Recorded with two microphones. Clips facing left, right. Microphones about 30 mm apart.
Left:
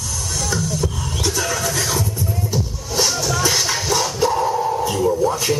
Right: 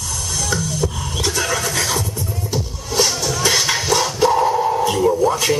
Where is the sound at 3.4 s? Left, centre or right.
Right.